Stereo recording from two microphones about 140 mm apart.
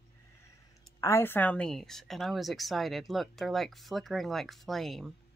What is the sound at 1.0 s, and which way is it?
Speech, 20° left (ahead or behind).